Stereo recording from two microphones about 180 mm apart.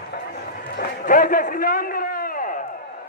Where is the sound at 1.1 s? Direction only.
50° left (ahead or behind).